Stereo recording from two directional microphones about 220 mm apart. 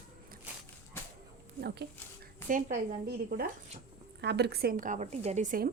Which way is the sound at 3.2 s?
40° right (ahead or behind).